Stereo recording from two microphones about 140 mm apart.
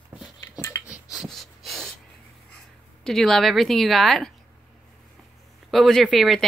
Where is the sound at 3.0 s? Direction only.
5° left (ahead or behind).